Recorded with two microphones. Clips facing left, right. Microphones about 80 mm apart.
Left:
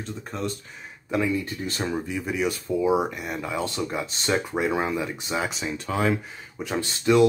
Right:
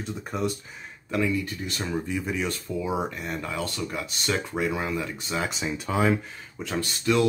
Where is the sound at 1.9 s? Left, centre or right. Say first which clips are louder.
Right 2 dB; centre.